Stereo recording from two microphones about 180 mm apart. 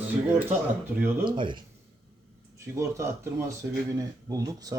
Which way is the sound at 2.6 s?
15° right (ahead or behind).